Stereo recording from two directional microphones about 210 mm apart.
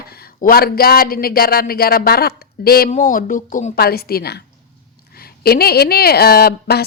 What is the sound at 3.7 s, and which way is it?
A woman's voice, 45° left (ahead or behind).